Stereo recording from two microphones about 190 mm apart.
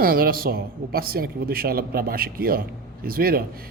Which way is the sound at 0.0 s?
50° right (ahead or behind).